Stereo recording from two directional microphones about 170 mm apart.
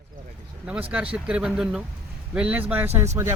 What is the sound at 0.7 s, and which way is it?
Speech, 10° right (ahead or behind).